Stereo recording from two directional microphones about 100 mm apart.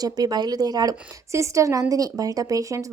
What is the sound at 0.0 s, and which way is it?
A woman's voice, 40° right (ahead or behind).